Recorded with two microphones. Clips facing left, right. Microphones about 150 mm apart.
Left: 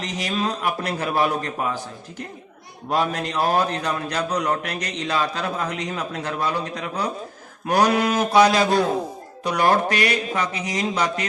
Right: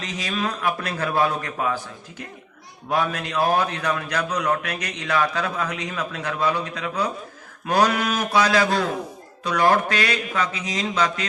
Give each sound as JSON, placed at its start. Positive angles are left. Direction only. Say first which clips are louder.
{"t": 0.0, "sound": "a man's voice", "louder": "left 2 dB", "side_deg": 20}
{"t": 2.9, "sound": "a man's voice", "louder": "left 1 dB", "side_deg": 20}